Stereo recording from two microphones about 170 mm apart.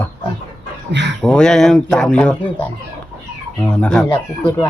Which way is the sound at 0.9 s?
90° right.